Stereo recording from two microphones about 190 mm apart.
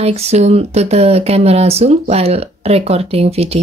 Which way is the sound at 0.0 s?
35° right (ahead or behind).